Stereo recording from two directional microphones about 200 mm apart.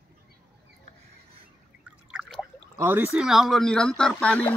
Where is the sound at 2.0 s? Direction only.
5° right (ahead or behind).